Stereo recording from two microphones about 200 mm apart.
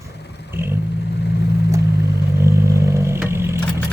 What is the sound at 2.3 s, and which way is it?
Vehicle, 15° right (ahead or behind).